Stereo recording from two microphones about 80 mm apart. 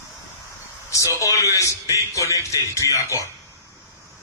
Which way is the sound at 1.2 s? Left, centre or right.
Left.